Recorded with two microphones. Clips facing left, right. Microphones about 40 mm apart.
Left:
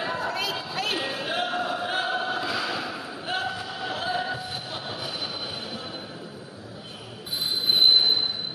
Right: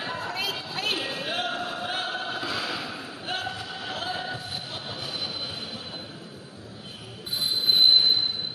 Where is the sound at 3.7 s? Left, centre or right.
Centre.